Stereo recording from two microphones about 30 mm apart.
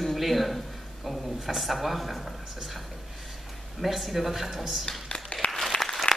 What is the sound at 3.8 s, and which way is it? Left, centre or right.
Speech, centre.